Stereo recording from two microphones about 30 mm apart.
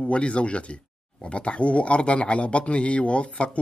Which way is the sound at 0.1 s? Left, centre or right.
Left.